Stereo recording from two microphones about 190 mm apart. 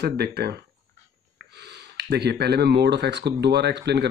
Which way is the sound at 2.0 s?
60° right (ahead or behind).